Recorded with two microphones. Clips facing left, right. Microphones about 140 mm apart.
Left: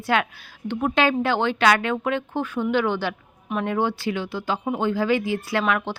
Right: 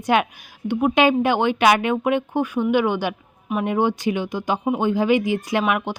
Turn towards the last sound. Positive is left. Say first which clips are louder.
# right 2 dB
turn(degrees=-15)  # may be behind; listen again after turning